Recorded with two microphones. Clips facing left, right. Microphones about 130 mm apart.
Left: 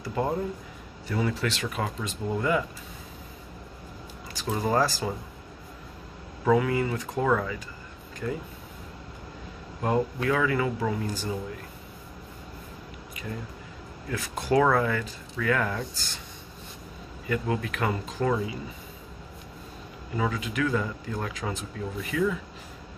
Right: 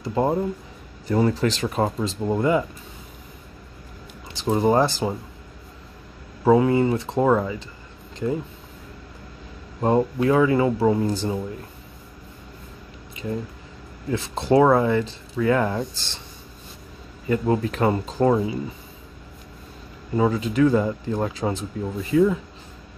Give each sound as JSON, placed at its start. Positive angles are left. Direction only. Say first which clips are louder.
{"t": 0.0, "sound": "speech", "louder": "right 6 dB", "side_deg": -25}
{"t": 1.0, "sound": "speech", "louder": "right 8 dB", "side_deg": -40}
{"t": 4.3, "sound": "speech", "louder": "right 7 dB", "side_deg": -25}
{"t": 6.4, "sound": "speech", "louder": "right 6 dB", "side_deg": -30}
{"t": 9.8, "sound": "speech", "louder": "right 6 dB", "side_deg": -30}
{"t": 14.0, "sound": "speech", "louder": "right 7 dB", "side_deg": -25}
{"t": 17.3, "sound": "speech", "louder": "right 7 dB", "side_deg": -30}
{"t": 20.2, "sound": "speech", "louder": "right 9 dB", "side_deg": -30}